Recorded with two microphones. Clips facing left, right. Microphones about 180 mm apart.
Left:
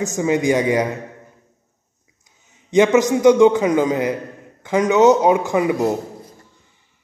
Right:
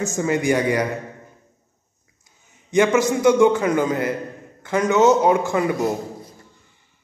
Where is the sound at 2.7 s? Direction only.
20° left (ahead or behind).